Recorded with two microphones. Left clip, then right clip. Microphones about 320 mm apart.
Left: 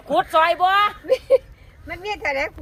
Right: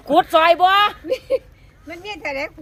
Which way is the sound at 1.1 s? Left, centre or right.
Centre.